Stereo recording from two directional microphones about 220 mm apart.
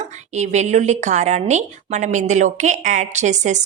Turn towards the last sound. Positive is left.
turn(degrees=-35)  # may be behind; listen again after turning